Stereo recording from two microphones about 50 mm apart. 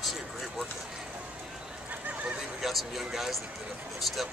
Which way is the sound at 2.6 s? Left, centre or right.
Centre.